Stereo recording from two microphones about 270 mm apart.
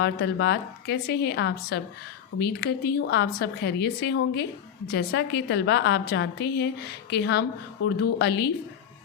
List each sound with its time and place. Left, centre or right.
0.0 s a woman's voice: left